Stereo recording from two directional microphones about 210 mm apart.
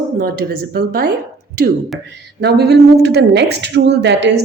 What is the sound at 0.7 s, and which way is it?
Speech, 45° right (ahead or behind).